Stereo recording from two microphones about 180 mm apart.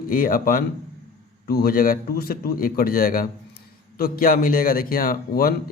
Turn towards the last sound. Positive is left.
turn(degrees=55)  # may be behind; listen again after turning